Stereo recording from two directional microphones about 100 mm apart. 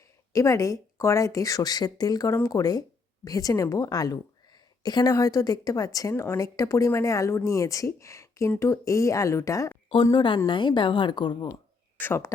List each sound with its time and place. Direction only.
0.3 s a woman's voice: 35° left (ahead or behind)
10.1 s a woman's voice: 55° left (ahead or behind)
11.9 s speech: 25° left (ahead or behind)